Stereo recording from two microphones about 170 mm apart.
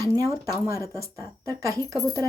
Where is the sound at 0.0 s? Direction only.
20° right (ahead or behind).